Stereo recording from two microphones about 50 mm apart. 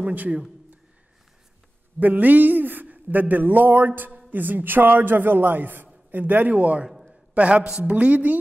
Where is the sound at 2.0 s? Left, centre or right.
Right.